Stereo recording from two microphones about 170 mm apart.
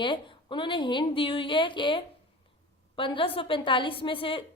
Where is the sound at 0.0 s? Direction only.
30° left (ahead or behind).